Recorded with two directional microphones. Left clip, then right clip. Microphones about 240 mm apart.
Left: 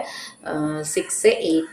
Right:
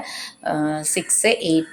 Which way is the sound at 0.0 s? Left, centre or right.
Right.